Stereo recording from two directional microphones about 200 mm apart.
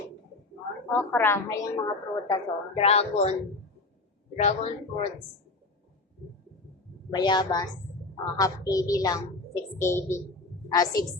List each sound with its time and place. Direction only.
0.9 s a woman's voice: 10° left (ahead or behind)
2.8 s speech: 30° left (ahead or behind)
4.4 s speech: 35° left (ahead or behind)
7.1 s a woman's voice: 20° left (ahead or behind)